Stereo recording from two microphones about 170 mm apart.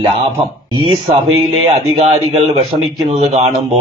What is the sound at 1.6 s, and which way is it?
Speech, 40° right (ahead or behind).